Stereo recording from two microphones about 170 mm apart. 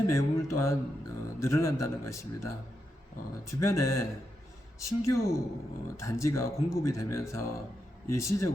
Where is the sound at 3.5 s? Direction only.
15° left (ahead or behind).